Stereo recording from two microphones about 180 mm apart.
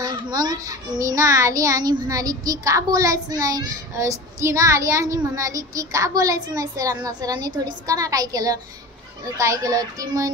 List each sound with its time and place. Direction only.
0.0 s a child's voice: 20° right (ahead or behind)